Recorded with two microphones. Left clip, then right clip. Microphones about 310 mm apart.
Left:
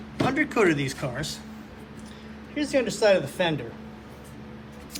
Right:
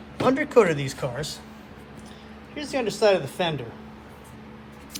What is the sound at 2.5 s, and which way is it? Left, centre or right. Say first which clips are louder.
Speech: left 2 dB; centre.